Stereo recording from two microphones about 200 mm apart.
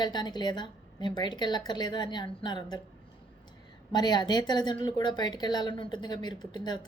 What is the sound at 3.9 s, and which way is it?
A woman's voice, 20° left (ahead or behind).